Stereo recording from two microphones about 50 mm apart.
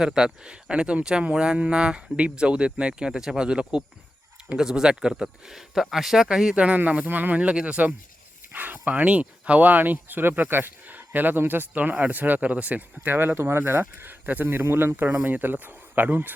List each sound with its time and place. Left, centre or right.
0.0 s speech: centre
6.6 s speech: right
13.1 s speech: right